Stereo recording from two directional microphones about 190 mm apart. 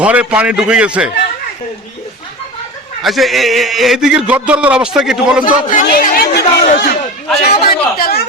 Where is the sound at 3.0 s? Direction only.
Centre (ahead or behind).